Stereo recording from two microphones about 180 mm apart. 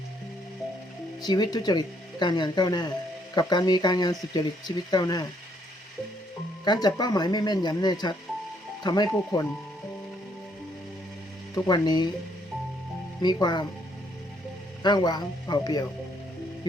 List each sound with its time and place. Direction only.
1.2 s speech: 20° left (ahead or behind)
6.7 s speech: 20° left (ahead or behind)
11.5 s speech: 20° left (ahead or behind)
13.2 s speech: 25° left (ahead or behind)
14.8 s speech: 25° left (ahead or behind)